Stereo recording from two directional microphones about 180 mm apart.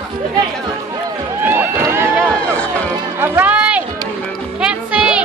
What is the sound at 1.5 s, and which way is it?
Run, 10° right (ahead or behind).